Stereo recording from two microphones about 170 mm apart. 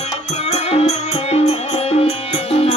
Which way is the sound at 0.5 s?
40° left (ahead or behind).